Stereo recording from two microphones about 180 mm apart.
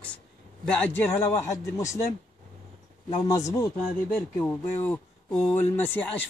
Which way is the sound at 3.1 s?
20° left (ahead or behind).